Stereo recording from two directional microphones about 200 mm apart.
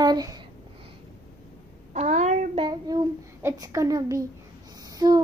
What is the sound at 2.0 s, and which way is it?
Speech, 35° right (ahead or behind).